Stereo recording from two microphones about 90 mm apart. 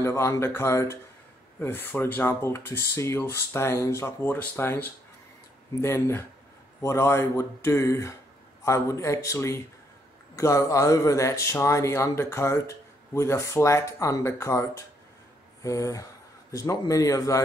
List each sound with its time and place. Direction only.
0.0 s speech: 30° left (ahead or behind)